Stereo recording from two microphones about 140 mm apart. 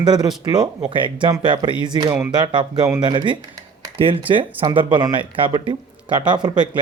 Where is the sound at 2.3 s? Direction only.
35° right (ahead or behind).